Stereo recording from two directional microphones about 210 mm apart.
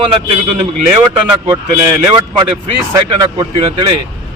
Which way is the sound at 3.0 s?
20° right (ahead or behind).